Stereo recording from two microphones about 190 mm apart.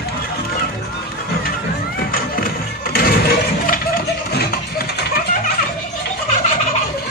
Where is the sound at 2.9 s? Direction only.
55° left (ahead or behind).